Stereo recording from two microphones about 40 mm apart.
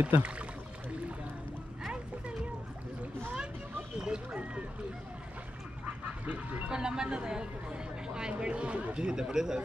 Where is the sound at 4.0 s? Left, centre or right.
Right.